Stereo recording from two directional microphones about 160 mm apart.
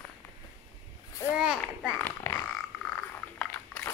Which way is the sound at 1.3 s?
5° right (ahead or behind).